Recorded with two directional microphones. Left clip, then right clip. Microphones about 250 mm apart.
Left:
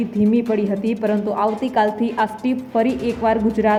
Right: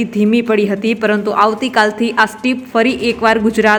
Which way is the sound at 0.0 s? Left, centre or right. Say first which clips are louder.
Right 5 dB; centre.